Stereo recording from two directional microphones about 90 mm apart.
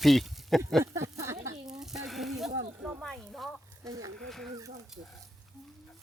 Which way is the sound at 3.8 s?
40° right (ahead or behind).